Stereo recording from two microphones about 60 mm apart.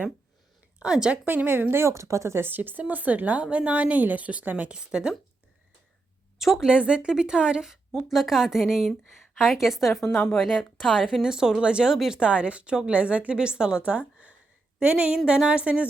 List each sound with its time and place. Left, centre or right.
0.8 s a woman's voice: centre
1.2 s a woman's voice: right
2.5 s speech: right; by 5.1 s centre
6.4 s a woman's voice: centre
6.7 s a woman's voice: centre
10.0 s speech: centre
10.8 s a woman's voice: centre